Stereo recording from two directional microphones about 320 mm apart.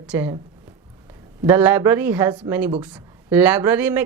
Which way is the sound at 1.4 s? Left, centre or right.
Centre.